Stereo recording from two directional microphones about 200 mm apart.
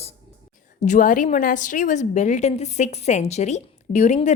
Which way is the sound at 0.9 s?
40° left (ahead or behind).